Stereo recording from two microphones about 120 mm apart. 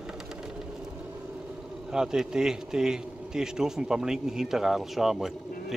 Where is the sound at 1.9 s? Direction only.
5° right (ahead or behind).